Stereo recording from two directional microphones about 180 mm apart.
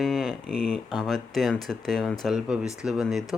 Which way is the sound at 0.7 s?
Centre (ahead or behind).